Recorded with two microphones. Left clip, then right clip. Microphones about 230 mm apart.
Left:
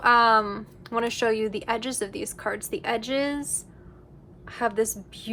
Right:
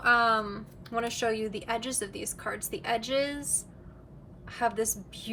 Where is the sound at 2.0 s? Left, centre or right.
Left.